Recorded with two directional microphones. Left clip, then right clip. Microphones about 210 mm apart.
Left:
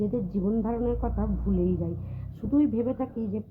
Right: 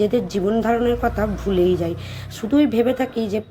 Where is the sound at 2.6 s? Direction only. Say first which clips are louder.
Right 9 dB; 15° right (ahead or behind).